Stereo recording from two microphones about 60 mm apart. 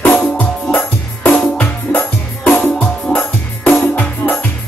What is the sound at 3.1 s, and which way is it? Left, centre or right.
Music, left.